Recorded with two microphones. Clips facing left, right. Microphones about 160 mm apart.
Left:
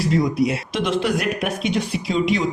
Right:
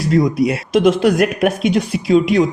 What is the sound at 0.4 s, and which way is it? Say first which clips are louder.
Speech: right 8 dB; 45° right (ahead or behind).